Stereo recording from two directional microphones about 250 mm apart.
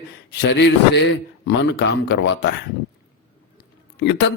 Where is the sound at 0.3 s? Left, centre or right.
Left.